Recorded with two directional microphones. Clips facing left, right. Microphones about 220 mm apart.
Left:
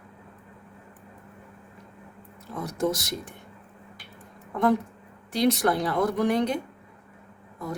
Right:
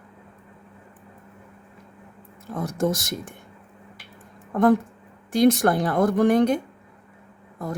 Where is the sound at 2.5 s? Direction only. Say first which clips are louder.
Right 3 dB; 50° right (ahead or behind).